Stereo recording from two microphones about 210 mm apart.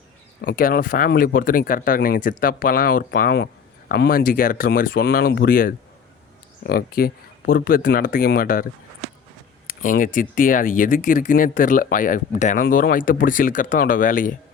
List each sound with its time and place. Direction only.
0.4 s speech: 45° left (ahead or behind)
9.6 s speech: 40° left (ahead or behind)